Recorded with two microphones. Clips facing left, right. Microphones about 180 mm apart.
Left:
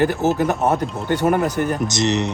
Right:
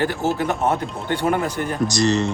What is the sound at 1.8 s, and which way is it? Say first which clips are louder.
Speech: right 1 dB; 20° left (ahead or behind).